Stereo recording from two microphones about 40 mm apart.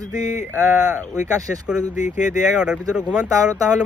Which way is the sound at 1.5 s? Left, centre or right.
Right.